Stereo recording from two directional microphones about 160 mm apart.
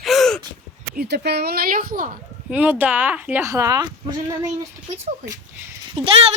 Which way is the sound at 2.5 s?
10° right (ahead or behind).